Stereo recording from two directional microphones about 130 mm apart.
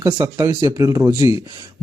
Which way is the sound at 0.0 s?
25° right (ahead or behind).